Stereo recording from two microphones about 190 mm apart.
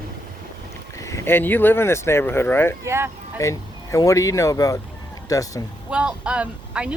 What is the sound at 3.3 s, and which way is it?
Speech, 15° left (ahead or behind).